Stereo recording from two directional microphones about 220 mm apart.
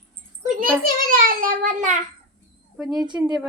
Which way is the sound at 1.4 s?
35° right (ahead or behind).